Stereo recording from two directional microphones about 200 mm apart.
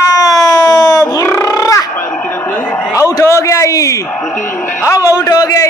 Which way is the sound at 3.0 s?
15° left (ahead or behind).